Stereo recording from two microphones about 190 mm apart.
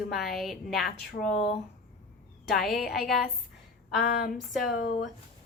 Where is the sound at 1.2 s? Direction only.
30° left (ahead or behind).